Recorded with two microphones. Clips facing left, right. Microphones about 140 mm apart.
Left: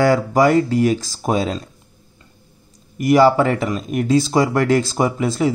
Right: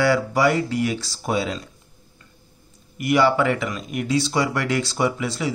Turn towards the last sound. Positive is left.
turn(degrees=45)  # may be behind; listen again after turning